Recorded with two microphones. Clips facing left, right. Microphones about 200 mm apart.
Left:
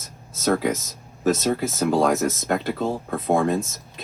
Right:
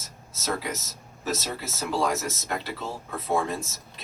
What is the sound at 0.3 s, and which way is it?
Speech, 50° left (ahead or behind).